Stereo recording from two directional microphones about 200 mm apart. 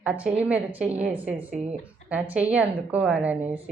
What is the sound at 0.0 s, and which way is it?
Speech, 5° right (ahead or behind).